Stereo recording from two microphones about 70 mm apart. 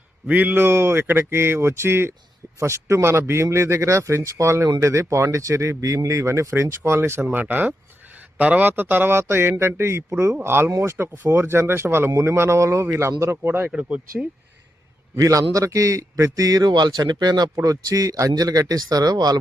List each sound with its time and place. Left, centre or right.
0.3 s speech: right
13.7 s speech: centre
15.1 s a man's voice: right